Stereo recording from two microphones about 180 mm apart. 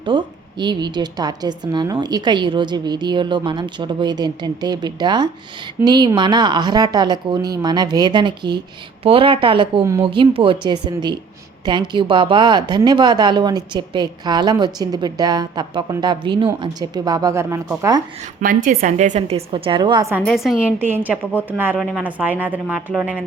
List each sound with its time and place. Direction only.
0.0 s a woman's voice: 25° right (ahead or behind)
18.3 s a woman's voice: 45° right (ahead or behind); by 20.1 s 20° right (ahead or behind)
20.1 s a woman's voice: centre (ahead or behind)